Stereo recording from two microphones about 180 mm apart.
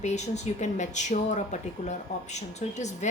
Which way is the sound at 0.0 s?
40° left (ahead or behind).